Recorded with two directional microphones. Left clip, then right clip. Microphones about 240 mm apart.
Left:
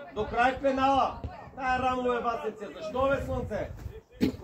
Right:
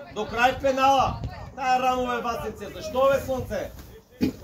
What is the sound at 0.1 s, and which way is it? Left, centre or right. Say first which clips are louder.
A man's voice: right 4 dB; right.